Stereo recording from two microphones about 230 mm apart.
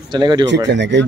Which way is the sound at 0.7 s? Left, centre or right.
Right.